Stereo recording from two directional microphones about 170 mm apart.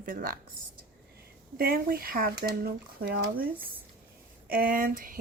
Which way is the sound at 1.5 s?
60° right (ahead or behind).